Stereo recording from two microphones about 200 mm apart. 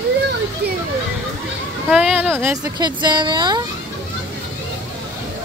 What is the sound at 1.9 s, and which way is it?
A woman's voice, 5° right (ahead or behind).